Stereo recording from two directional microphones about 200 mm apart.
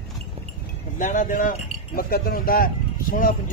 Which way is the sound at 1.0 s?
40° left (ahead or behind).